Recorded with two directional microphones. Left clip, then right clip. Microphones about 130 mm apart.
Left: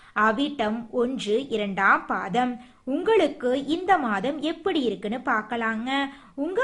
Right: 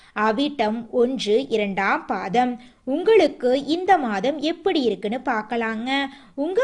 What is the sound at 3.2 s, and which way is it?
A woman's voice, 25° right (ahead or behind).